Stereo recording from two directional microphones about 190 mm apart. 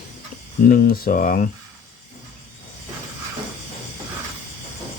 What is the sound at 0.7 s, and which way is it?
Speech, 50° left (ahead or behind).